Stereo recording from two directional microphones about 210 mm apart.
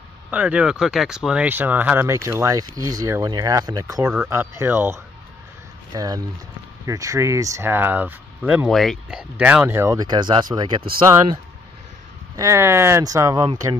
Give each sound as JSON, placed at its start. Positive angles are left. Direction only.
{"t": 0.3, "sound": "speech", "side_deg": -5}
{"t": 12.4, "sound": "speech", "side_deg": -15}